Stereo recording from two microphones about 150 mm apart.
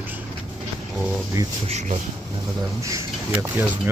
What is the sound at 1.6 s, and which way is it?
Speech, 45° right (ahead or behind).